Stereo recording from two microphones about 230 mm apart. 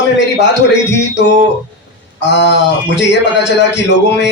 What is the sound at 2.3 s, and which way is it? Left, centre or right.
A man's voice, left.